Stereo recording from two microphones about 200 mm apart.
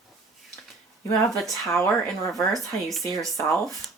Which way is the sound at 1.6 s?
10° left (ahead or behind).